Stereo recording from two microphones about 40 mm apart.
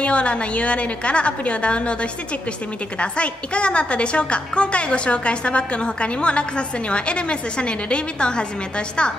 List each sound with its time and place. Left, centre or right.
0.0 s a woman's voice: left